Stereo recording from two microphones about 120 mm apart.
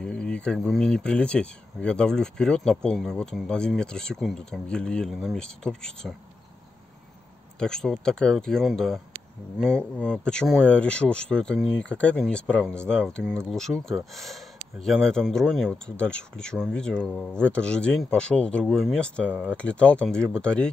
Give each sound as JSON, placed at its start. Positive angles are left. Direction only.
{"t": 0.0, "sound": "speech", "side_deg": 5}
{"t": 7.5, "sound": "speech", "side_deg": 5}